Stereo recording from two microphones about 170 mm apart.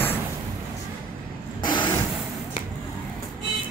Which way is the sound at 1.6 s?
25° left (ahead or behind).